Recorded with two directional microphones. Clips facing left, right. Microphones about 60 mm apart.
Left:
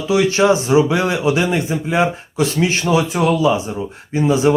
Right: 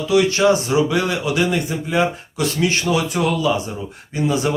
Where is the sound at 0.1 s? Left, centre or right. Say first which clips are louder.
Left 1 dB; left.